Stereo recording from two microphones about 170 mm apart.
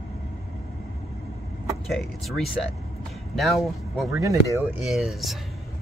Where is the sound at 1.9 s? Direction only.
Centre (ahead or behind).